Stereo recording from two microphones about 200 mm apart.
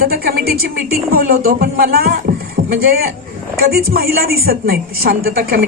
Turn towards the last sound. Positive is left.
turn(degrees=-50)  # may be behind; listen again after turning